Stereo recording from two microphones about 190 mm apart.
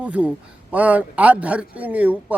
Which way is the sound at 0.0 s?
5° right (ahead or behind).